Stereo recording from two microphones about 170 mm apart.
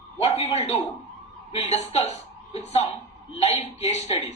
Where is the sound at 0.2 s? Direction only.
40° left (ahead or behind).